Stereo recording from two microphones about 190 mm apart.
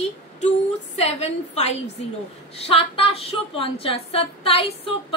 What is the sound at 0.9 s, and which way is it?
A woman's voice, 35° left (ahead or behind).